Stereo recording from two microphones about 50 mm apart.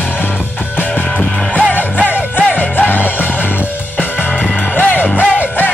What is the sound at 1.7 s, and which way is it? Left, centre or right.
Music, left.